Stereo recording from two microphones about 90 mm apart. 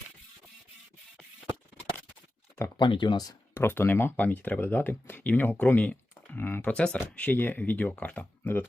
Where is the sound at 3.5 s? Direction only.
25° left (ahead or behind).